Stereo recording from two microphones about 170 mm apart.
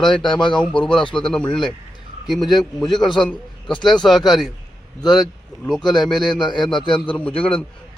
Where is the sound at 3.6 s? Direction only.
30° left (ahead or behind).